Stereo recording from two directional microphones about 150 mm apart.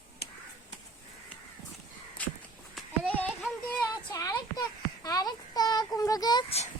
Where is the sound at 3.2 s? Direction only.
10° left (ahead or behind).